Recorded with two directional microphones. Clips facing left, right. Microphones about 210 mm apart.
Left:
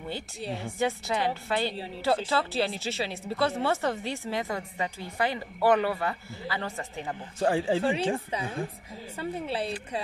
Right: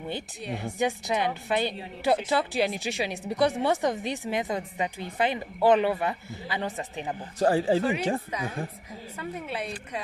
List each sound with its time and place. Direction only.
0.7 s speech: 15° right (ahead or behind)
7.3 s speech: 40° right (ahead or behind)
7.8 s speech: 30° left (ahead or behind)
9.2 s speech: 30° left (ahead or behind)